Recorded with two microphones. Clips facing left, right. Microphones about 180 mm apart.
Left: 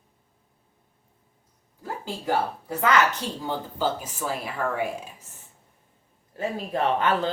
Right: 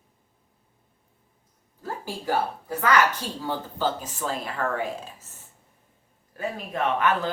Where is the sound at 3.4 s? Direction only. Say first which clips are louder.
Even; 10° left (ahead or behind).